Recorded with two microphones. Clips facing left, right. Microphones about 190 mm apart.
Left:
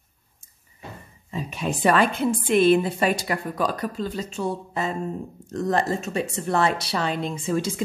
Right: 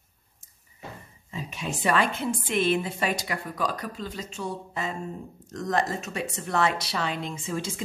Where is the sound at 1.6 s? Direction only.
55° left (ahead or behind).